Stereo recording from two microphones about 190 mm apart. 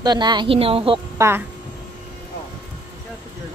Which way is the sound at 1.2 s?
10° right (ahead or behind).